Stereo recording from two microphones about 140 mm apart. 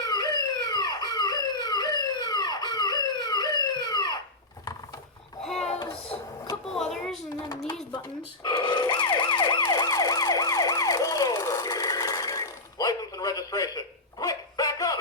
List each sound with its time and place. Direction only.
0.0 s police car: 30° left (ahead or behind)
5.4 s a sound: 5° left (ahead or behind)
8.4 s emergency vehicle: 35° left (ahead or behind)